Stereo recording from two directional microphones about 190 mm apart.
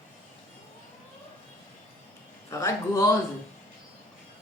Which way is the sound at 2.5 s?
15° left (ahead or behind).